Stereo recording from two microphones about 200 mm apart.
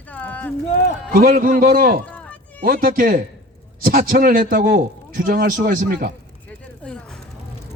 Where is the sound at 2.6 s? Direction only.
45° right (ahead or behind).